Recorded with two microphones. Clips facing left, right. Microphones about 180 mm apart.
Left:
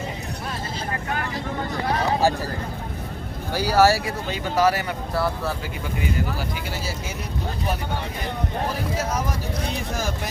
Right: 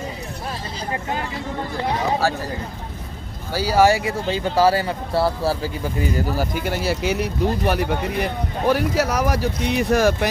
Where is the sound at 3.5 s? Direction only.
10° right (ahead or behind).